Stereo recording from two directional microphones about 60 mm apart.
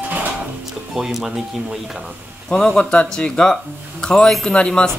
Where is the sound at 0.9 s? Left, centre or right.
Centre.